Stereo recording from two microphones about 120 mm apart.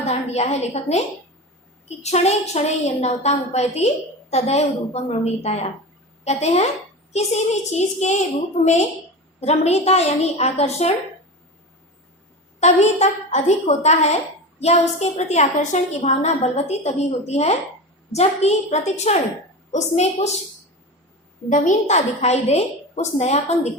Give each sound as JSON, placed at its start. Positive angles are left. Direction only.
{"t": 0.0, "sound": "a woman's voice", "side_deg": 65}
{"t": 12.5, "sound": "a woman's voice", "side_deg": 70}
{"t": 21.5, "sound": "a woman's voice", "side_deg": 90}